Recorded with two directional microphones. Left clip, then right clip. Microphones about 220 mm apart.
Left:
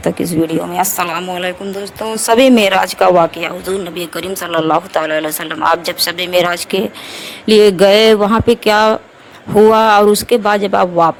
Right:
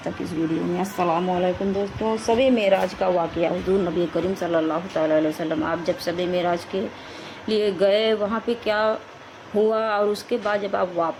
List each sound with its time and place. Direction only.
0.8 s a woman's voice: 50° left (ahead or behind)
4.5 s a woman's voice: 50° left (ahead or behind)